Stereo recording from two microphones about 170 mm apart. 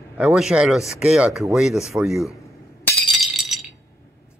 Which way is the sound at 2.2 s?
20° left (ahead or behind).